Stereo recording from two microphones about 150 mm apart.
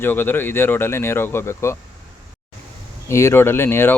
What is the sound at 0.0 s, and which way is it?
Speech, 15° left (ahead or behind).